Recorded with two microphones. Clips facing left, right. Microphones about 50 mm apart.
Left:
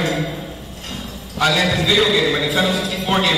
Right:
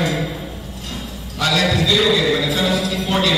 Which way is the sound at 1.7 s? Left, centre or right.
Centre.